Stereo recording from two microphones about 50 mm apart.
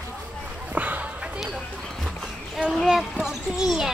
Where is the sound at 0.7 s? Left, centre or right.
Right.